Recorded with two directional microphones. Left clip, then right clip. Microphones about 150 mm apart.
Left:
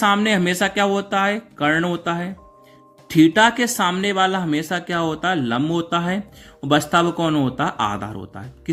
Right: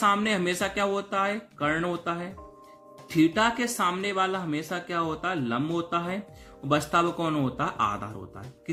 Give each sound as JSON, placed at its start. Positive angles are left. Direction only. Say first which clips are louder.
{"t": 0.0, "sound": "speech", "louder": "left 6 dB", "side_deg": 40}